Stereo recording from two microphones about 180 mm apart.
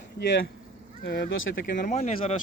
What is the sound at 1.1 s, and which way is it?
Speech, 65° left (ahead or behind).